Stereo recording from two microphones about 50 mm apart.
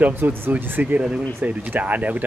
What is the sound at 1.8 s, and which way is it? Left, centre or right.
Speech, right.